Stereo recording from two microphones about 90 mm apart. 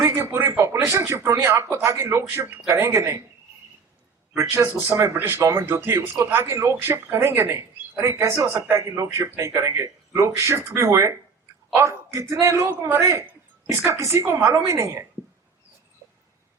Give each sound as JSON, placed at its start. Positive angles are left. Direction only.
{"t": 0.0, "sound": "a man's voice", "side_deg": -35}
{"t": 4.4, "sound": "speech", "side_deg": -30}
{"t": 5.4, "sound": "a man's voice", "side_deg": -35}
{"t": 5.6, "sound": "a man's voice", "side_deg": -25}